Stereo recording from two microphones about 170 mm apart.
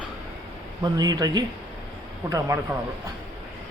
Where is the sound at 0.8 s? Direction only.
25° right (ahead or behind).